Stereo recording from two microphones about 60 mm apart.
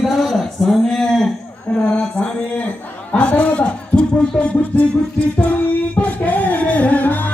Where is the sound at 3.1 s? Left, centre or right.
Left.